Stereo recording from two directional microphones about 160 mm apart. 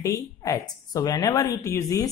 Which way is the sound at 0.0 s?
20° left (ahead or behind).